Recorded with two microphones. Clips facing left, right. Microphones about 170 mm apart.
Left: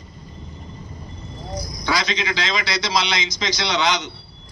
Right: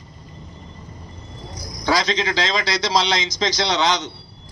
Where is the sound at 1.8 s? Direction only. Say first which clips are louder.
Right 4 dB; 40° right (ahead or behind).